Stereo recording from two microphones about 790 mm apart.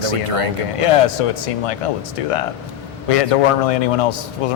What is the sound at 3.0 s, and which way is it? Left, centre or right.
A man's voice, left.